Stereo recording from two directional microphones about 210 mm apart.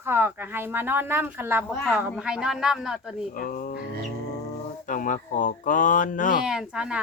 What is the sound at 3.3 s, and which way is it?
Speech, 40° left (ahead or behind).